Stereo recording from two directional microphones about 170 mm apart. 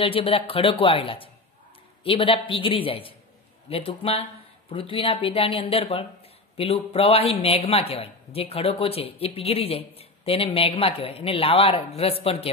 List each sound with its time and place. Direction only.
0.0 s speech: 35° left (ahead or behind)